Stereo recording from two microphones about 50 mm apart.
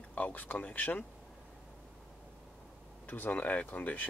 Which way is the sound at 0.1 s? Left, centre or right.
Left.